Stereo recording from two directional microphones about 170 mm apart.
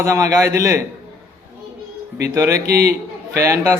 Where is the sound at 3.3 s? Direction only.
20° right (ahead or behind).